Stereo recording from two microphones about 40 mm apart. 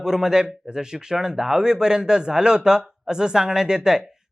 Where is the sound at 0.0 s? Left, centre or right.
Centre.